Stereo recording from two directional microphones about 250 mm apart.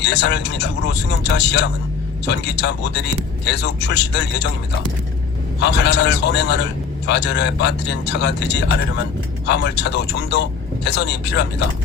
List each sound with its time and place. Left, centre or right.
0.0 s speech: left
5.5 s speech: left